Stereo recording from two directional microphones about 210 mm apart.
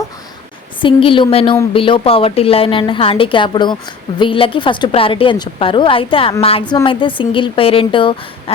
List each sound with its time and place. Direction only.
0.8 s a woman's voice: 25° left (ahead or behind)